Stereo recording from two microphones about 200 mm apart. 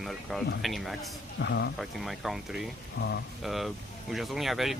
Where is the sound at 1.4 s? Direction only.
60° left (ahead or behind).